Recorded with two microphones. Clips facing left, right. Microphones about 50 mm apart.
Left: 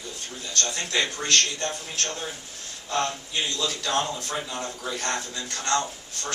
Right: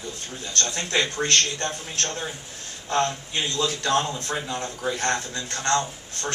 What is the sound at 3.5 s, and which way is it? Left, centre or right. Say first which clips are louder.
Speech: right 5 dB; right.